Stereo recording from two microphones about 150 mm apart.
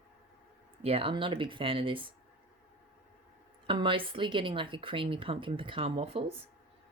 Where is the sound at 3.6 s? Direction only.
35° right (ahead or behind).